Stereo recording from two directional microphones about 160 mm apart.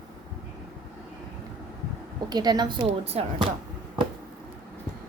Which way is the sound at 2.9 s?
40° right (ahead or behind).